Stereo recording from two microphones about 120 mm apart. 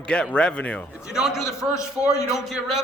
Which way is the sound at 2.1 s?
25° left (ahead or behind).